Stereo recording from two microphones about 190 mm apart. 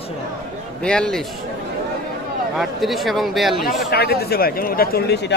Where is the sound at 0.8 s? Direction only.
5° left (ahead or behind).